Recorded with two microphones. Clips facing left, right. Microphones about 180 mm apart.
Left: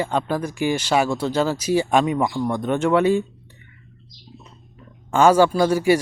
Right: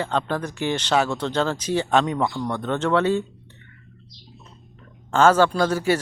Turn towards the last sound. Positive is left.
turn(degrees=10)  # may be behind; listen again after turning